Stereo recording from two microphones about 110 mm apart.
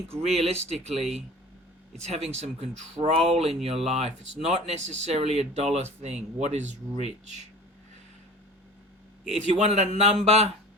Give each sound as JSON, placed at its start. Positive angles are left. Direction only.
{"t": 0.2, "sound": "speech", "side_deg": -70}
{"t": 3.0, "sound": "speech", "side_deg": -65}
{"t": 5.7, "sound": "speech", "side_deg": -85}
{"t": 9.5, "sound": "speech", "side_deg": -85}